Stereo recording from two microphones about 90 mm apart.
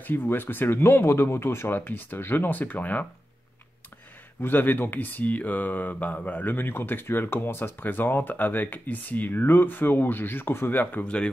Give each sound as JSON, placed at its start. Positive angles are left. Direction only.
{"t": 0.0, "sound": "speech", "side_deg": 20}
{"t": 4.4, "sound": "speech", "side_deg": 20}